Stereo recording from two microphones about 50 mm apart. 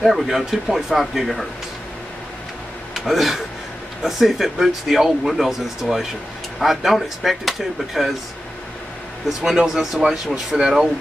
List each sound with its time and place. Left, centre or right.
0.0 s speech: centre
2.9 s speech: centre
9.4 s speech: centre